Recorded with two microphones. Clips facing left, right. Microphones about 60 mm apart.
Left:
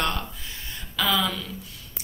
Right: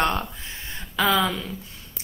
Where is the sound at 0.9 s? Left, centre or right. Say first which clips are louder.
Right 3 dB; right.